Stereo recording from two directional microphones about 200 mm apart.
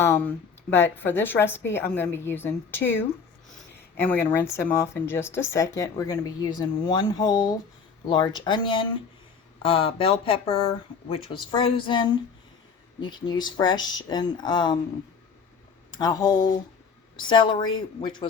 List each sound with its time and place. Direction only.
0.0 s speech: 10° left (ahead or behind)
13.1 s speech: 20° left (ahead or behind)
15.9 s speech: 20° left (ahead or behind)